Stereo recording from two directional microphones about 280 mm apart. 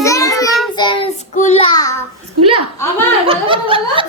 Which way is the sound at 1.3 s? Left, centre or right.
Left.